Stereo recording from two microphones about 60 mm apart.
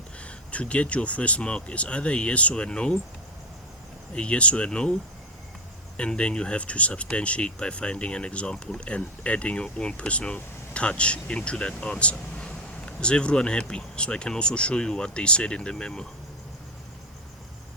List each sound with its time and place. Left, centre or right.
0.2 s speech: centre
4.1 s speech: centre
6.0 s speech: centre